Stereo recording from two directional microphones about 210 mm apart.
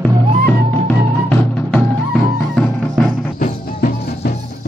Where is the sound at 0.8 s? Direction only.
5° left (ahead or behind).